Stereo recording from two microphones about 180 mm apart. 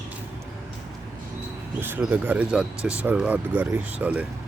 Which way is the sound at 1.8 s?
10° right (ahead or behind).